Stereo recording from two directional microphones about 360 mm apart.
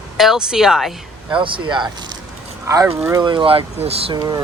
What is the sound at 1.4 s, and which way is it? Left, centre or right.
Speech, centre.